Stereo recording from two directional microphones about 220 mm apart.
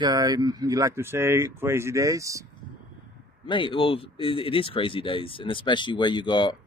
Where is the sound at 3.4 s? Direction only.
20° left (ahead or behind).